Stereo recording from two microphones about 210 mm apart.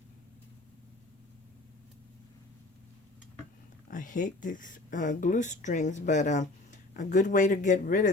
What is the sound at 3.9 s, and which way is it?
Speech, 40° left (ahead or behind).